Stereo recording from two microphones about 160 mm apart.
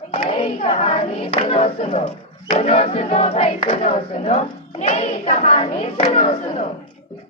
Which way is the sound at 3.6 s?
50° left (ahead or behind).